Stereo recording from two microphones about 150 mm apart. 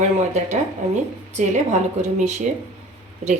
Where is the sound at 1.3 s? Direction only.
50° right (ahead or behind).